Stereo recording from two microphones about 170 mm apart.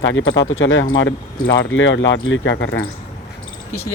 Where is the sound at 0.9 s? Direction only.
75° left (ahead or behind).